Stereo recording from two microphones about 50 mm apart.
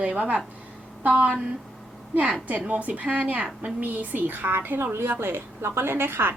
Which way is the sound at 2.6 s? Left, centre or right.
Right.